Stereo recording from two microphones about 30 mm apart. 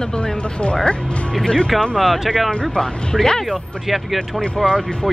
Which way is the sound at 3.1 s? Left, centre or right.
Centre.